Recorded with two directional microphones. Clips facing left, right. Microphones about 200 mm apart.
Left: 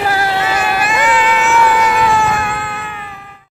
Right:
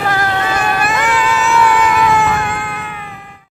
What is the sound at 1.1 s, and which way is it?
Vehicle, 40° right (ahead or behind).